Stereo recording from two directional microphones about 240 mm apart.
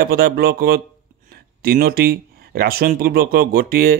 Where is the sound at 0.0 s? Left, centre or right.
Right.